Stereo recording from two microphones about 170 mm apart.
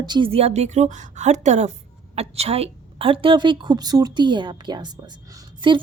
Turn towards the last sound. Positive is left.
turn(degrees=-30)  # may be behind; listen again after turning